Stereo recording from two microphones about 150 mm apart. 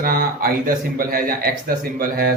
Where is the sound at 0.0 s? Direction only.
70° right (ahead or behind).